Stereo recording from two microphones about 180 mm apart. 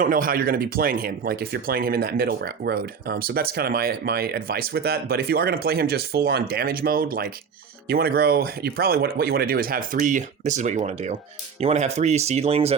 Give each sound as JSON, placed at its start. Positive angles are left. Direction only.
{"t": 0.0, "sound": "speech", "side_deg": -50}